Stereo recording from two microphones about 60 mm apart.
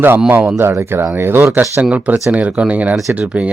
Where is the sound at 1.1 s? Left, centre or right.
Right.